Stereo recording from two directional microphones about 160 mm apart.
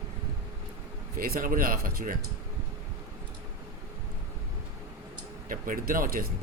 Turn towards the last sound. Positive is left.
turn(degrees=-65)  # may be behind; listen again after turning